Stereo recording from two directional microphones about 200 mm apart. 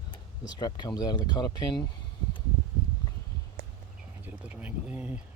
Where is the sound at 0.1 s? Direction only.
20° left (ahead or behind).